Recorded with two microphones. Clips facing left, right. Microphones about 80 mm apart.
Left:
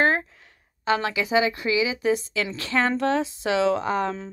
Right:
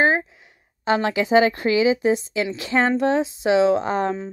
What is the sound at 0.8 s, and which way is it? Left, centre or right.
Speech, right.